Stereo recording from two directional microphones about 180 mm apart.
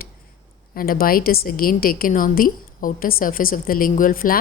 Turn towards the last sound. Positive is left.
turn(degrees=50)  # may be behind; listen again after turning